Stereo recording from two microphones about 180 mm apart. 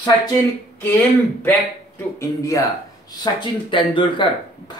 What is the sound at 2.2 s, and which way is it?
Speech, 15° left (ahead or behind).